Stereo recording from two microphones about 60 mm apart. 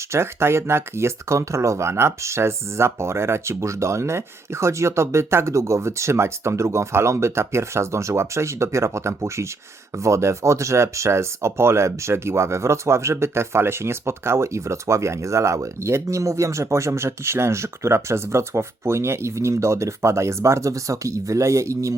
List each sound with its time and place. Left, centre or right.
0.1 s speech: right